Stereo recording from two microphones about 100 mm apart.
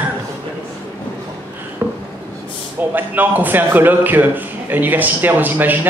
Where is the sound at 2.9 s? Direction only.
20° right (ahead or behind).